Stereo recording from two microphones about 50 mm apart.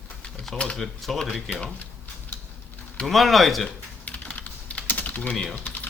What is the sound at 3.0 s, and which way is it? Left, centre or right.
Speech, centre.